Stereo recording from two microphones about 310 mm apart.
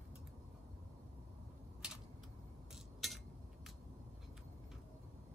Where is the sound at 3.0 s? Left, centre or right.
Centre.